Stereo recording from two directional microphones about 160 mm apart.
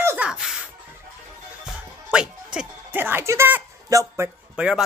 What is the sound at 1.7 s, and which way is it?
Music, 5° right (ahead or behind).